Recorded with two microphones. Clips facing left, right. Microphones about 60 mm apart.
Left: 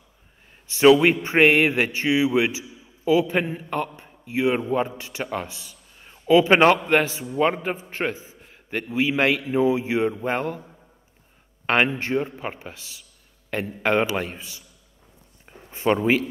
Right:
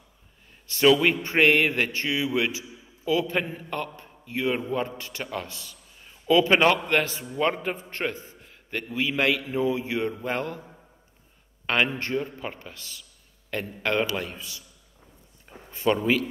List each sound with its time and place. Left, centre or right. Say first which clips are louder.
0.7 s a man's voice: left 5 dB; centre
11.9 s a man's voice: left 4 dB; centre
15.7 s speech: left 3 dB; left